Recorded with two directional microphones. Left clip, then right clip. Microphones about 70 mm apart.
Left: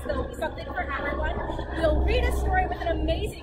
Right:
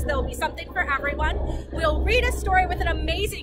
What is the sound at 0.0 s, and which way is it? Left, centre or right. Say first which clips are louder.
A woman's voice: right 4 dB; right.